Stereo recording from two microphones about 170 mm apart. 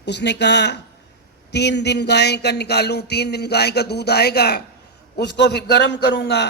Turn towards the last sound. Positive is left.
turn(degrees=80)